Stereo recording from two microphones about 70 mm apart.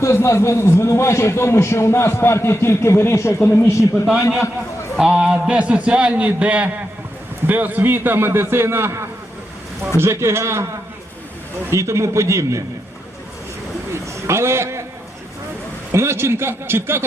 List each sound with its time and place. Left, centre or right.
0.0 s a man's voice: left
4.9 s a man's voice: centre; by 10.7 s right
11.7 s a man's voice: right
14.3 s a man's voice: right
15.9 s a man's voice: right